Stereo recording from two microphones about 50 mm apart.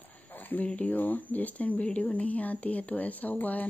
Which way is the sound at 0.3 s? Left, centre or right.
Left.